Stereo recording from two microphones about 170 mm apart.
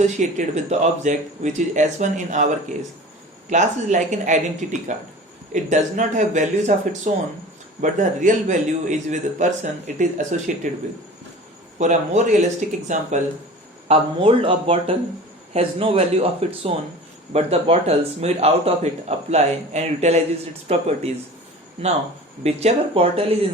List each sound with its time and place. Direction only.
0.0 s a man's voice: 45° right (ahead or behind)
11.8 s a man's voice: 45° right (ahead or behind)
13.8 s a man's voice: 35° right (ahead or behind)
22.4 s a man's voice: 35° right (ahead or behind)